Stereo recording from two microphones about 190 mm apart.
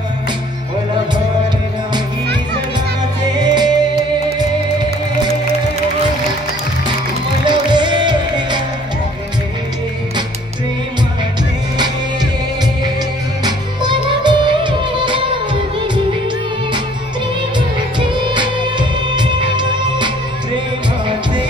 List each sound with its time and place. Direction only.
3.3 s music: 20° right (ahead or behind)
7.4 s music: 25° right (ahead or behind)
13.4 s music of bollywood: 20° right (ahead or behind)
17.6 s music: 25° right (ahead or behind)